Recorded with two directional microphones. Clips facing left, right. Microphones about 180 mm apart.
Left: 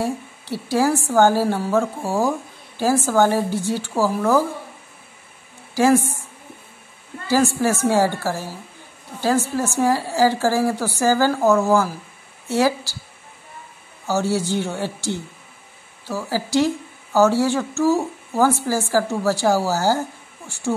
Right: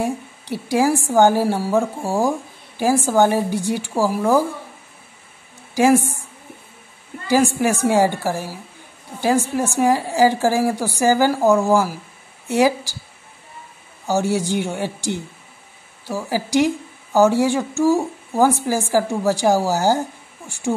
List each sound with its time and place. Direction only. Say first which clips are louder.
0.0 s a woman's voice: right 1 dB; 15° right (ahead or behind)
5.8 s a woman's voice: right 1 dB; 15° right (ahead or behind)
7.2 s a woman's voice: right 1 dB; 15° right (ahead or behind)
14.0 s a woman's voice: right 1 dB; 15° right (ahead or behind)